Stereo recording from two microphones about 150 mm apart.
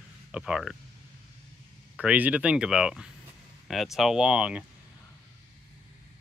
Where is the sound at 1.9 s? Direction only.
10° right (ahead or behind).